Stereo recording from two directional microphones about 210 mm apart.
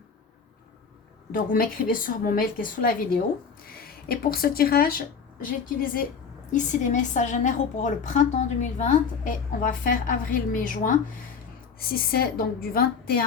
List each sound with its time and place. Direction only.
1.3 s a woman's voice: 45° left (ahead or behind)